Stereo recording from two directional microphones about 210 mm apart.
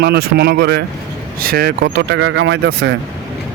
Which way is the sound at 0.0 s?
50° right (ahead or behind).